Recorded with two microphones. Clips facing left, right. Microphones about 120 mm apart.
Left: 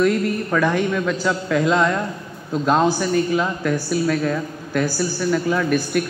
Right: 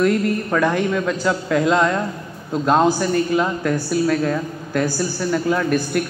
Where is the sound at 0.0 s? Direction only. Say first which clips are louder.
Right 1 dB; 15° right (ahead or behind).